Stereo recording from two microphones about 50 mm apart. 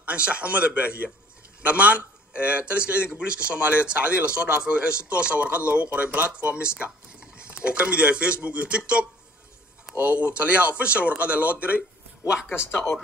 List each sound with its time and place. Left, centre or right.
0.0 s a man's voice: right